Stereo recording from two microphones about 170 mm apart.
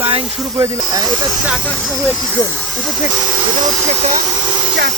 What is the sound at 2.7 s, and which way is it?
Speech, centre (ahead or behind).